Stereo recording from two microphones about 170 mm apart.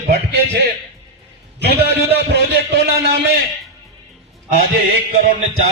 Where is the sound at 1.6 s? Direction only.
70° right (ahead or behind).